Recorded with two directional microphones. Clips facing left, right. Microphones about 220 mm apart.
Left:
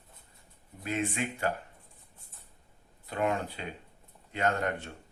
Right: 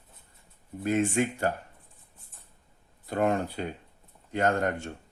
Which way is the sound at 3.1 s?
45° right (ahead or behind).